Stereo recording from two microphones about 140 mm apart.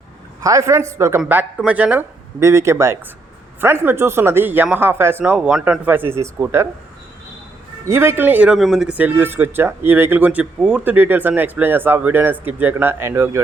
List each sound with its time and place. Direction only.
0.4 s speech: 20° right (ahead or behind)
7.9 s speech: 20° right (ahead or behind)
8.5 s speech: centre (ahead or behind); by 13.4 s 20° right (ahead or behind)